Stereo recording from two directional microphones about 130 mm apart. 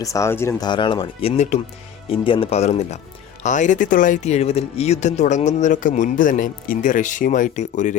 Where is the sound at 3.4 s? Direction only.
75° left (ahead or behind).